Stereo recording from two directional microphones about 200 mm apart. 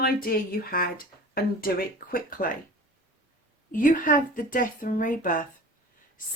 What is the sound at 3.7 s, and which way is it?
Speech, 40° left (ahead or behind).